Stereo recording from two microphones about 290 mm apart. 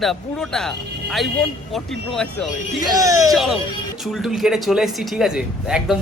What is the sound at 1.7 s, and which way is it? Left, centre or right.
Speech, centre.